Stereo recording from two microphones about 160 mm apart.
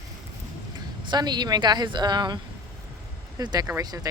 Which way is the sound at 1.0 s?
25° right (ahead or behind).